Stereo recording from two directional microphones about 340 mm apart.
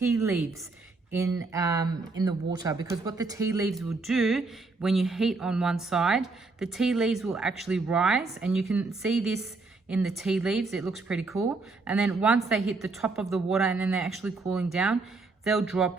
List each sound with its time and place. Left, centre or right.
0.0 s a woman's voice: centre